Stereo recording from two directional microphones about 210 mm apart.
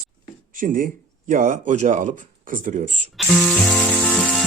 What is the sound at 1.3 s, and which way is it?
Speech, 40° right (ahead or behind).